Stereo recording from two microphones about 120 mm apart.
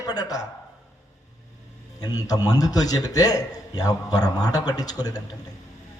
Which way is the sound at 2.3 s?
30° left (ahead or behind).